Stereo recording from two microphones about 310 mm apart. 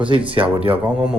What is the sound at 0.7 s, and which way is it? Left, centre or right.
Speech, centre.